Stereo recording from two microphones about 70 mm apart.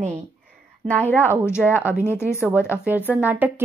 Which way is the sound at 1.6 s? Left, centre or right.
Right.